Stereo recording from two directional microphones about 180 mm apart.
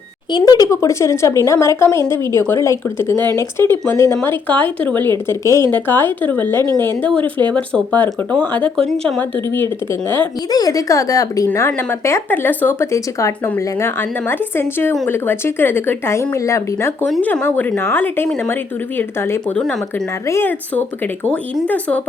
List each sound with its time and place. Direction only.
0.3 s a woman's voice: 20° left (ahead or behind)
6.6 s a woman's voice: 20° right (ahead or behind)
6.8 s a woman's voice: 10° left (ahead or behind)